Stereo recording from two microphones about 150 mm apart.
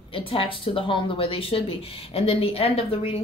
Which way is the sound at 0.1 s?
35° left (ahead or behind).